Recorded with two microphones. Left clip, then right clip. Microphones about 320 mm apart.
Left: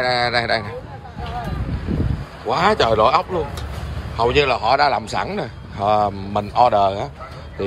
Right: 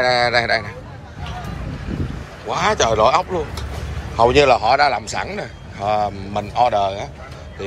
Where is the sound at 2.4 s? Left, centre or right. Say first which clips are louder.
Left 1 dB; centre.